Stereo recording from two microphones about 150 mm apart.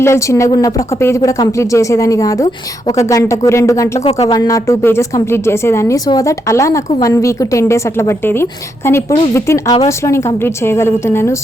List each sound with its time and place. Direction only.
0.0 s a woman's voice: 20° left (ahead or behind)